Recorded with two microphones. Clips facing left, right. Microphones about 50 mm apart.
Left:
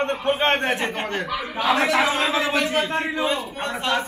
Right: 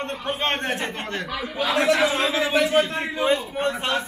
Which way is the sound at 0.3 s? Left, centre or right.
Centre.